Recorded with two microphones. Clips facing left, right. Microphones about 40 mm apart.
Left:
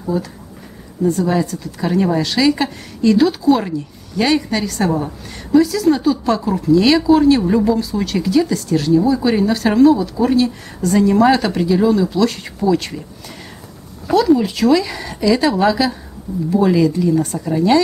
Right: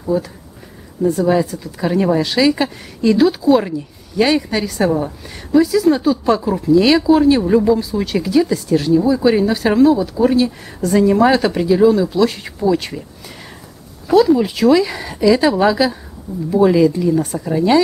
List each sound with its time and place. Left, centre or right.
0.1 s a woman's voice: centre
14.0 s a woman's voice: centre